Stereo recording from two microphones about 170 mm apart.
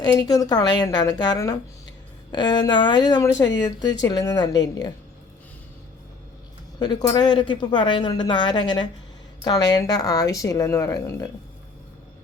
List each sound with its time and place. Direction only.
0.2 s speech: 25° left (ahead or behind)
6.7 s speech: 25° left (ahead or behind)